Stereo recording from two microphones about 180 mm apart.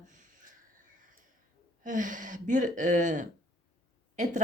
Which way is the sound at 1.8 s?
45° right (ahead or behind).